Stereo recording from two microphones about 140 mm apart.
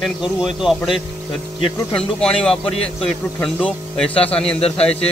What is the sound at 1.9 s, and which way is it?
Speech, 5° left (ahead or behind).